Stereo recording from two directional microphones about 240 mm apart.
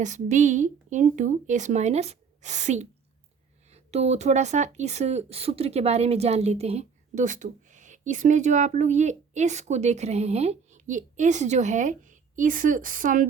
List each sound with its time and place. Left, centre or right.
0.0 s speech: right